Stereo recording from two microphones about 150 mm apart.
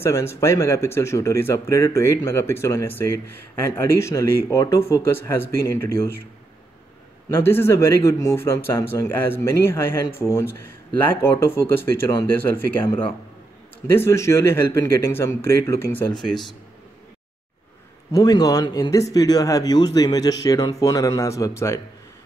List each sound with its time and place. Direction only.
0.0 s speech: 15° left (ahead or behind)
7.2 s speech: 15° left (ahead or behind)
16.2 s speech: centre (ahead or behind)
18.1 s speech: 25° left (ahead or behind)